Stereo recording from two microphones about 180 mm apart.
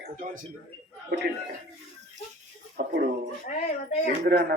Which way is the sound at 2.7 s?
55° right (ahead or behind).